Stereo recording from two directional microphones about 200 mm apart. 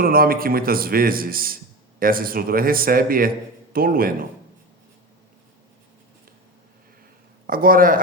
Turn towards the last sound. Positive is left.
turn(degrees=-45)  # may be behind; listen again after turning